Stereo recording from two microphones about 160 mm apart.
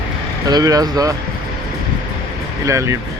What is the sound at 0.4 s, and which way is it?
Speech, 20° right (ahead or behind).